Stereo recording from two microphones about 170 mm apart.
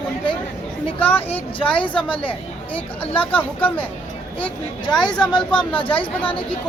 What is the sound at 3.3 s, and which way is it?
Speech, 10° left (ahead or behind).